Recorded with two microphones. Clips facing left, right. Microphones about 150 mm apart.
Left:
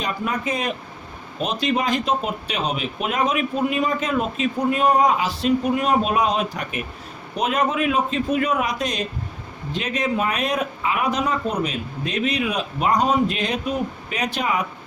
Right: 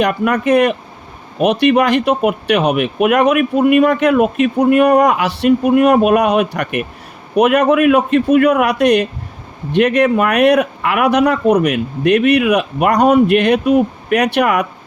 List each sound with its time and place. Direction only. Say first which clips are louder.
0.0 s speech: right 10 dB; 70° right (ahead or behind)